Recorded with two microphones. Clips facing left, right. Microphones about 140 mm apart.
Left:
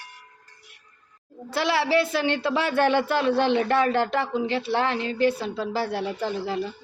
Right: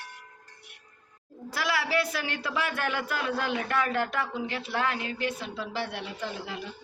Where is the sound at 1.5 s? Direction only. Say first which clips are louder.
Left 6 dB; 25° left (ahead or behind).